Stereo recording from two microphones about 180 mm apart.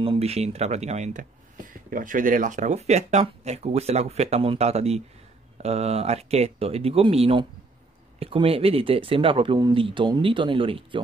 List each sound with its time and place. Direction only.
0.0 s speech: 30° right (ahead or behind)